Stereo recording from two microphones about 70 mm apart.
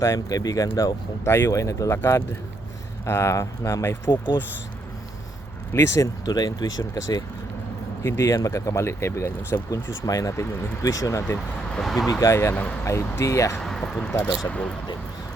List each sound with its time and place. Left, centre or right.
0.0 s speech: left
1.2 s speech: left
1.5 s speech: left
3.0 s speech: left
3.8 s speech: left
5.7 s speech: left
6.2 s speech: left
8.0 s speech: left
9.6 s speech: left
11.7 s speech: centre
12.2 s speech: left
13.6 s a sound: centre
14.4 s speech: centre